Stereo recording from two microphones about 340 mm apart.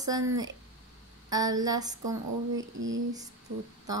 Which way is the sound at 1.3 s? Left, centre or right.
Centre.